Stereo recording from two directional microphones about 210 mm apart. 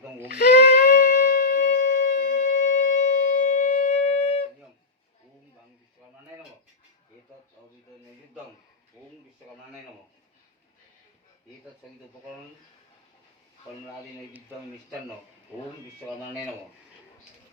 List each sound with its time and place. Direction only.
0.3 s shofar: 50° left (ahead or behind)